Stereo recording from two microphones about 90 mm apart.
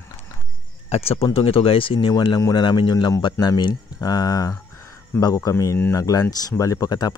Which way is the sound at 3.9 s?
45° left (ahead or behind).